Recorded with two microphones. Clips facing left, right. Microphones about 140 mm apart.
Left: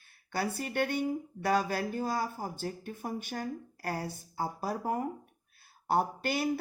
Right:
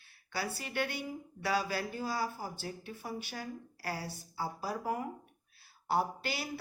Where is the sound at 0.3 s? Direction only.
50° left (ahead or behind).